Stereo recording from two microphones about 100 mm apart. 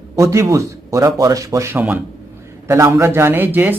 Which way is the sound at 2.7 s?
30° right (ahead or behind).